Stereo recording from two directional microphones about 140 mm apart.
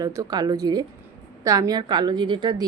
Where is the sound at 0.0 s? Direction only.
25° right (ahead or behind).